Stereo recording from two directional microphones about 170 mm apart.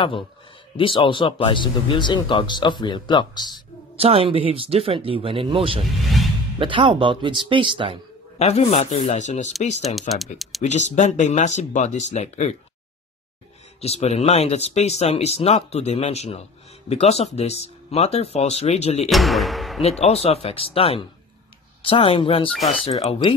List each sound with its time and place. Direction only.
0.7 s speech: 30° left (ahead or behind)
3.9 s speech: 35° right (ahead or behind)
6.2 s music: centre (ahead or behind)
6.6 s speech: 30° right (ahead or behind)
8.4 s speech: 40° left (ahead or behind)
9.8 s speech: centre (ahead or behind)
10.6 s speech: 45° left (ahead or behind)
13.7 s speech: 40° left (ahead or behind)
19.0 s speech: centre (ahead or behind)
19.8 s speech: 40° left (ahead or behind)